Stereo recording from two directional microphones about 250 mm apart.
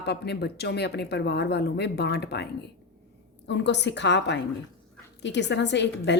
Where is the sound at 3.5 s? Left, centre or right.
Left.